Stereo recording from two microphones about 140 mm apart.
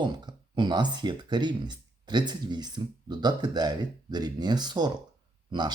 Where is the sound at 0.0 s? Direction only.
30° right (ahead or behind).